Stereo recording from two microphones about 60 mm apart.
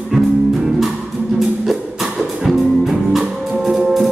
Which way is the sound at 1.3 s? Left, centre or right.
Centre.